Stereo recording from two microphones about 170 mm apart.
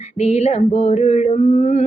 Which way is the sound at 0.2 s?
40° left (ahead or behind).